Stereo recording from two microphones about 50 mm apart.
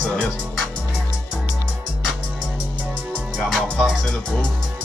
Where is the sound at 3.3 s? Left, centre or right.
Centre.